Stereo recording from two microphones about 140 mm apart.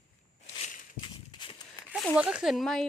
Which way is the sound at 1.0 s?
35° left (ahead or behind).